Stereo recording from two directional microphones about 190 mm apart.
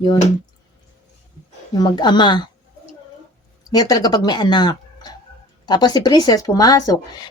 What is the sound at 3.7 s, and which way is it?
Speech, 20° left (ahead or behind).